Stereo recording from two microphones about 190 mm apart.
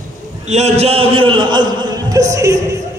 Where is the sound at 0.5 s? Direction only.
35° right (ahead or behind).